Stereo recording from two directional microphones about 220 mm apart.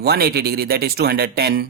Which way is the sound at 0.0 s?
45° right (ahead or behind).